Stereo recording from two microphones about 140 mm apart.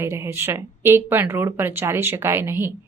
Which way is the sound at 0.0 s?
20° right (ahead or behind).